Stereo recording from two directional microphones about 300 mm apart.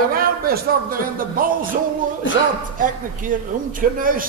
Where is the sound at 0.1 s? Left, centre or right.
Right.